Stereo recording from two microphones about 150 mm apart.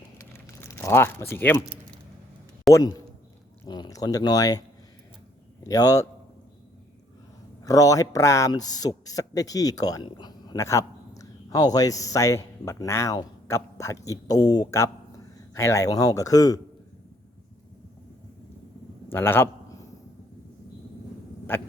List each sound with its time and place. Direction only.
0.3 s speech: 15° left (ahead or behind)
2.7 s speech: 20° left (ahead or behind)
5.6 s speech: 25° left (ahead or behind)
7.6 s speech: 25° left (ahead or behind)
19.1 s a man's voice: 15° left (ahead or behind)
21.5 s a man's voice: 10° left (ahead or behind)